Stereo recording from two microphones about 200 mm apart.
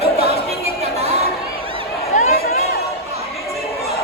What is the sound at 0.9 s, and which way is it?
Chatter, 30° right (ahead or behind).